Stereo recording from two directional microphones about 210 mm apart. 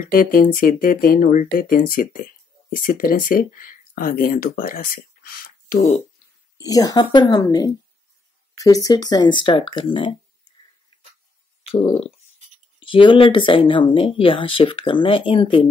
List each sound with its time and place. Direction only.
0.0 s speech: 40° left (ahead or behind)
6.6 s a woman's voice: 15° left (ahead or behind)
11.6 s a sound: 30° left (ahead or behind)
12.8 s speech: 25° left (ahead or behind)